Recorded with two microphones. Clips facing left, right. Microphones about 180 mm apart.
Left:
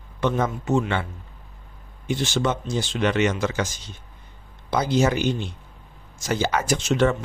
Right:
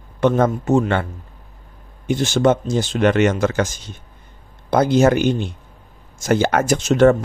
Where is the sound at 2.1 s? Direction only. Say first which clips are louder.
Right 8 dB; 50° right (ahead or behind).